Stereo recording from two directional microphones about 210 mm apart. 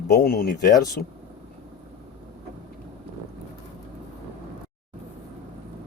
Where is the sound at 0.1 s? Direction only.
45° left (ahead or behind).